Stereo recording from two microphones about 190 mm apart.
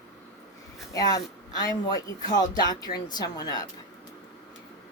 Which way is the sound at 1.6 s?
20° left (ahead or behind).